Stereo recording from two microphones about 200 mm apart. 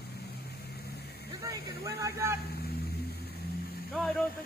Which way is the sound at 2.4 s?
50° left (ahead or behind).